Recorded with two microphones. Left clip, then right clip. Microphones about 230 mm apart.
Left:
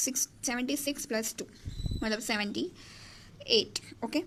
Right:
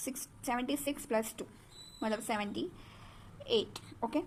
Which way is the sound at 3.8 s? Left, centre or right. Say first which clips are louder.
Left 2 dB; left.